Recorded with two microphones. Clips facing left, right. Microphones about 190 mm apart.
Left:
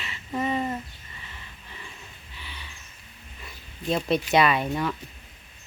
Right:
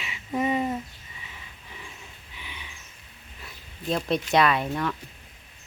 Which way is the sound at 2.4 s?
15° right (ahead or behind).